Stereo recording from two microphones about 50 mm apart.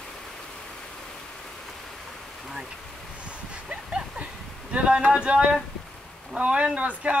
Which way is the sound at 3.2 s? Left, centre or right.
Right.